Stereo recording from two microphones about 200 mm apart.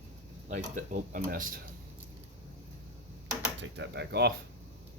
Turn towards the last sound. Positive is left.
turn(degrees=-55)  # may be behind; listen again after turning